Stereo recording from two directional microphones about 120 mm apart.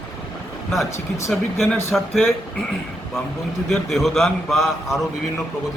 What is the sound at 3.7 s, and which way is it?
A man's voice, centre (ahead or behind).